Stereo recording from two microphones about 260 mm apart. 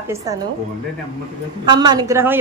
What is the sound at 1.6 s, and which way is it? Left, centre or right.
Speech, centre.